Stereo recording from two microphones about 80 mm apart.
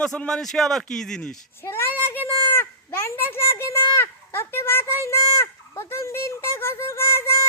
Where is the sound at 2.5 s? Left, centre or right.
Left.